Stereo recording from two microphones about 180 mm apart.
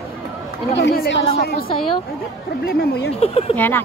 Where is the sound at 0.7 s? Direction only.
65° left (ahead or behind).